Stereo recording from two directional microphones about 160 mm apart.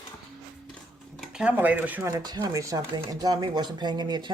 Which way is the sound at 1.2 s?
5° right (ahead or behind).